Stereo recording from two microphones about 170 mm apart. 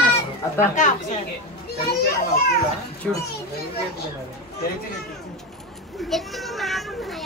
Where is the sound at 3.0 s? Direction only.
Centre (ahead or behind).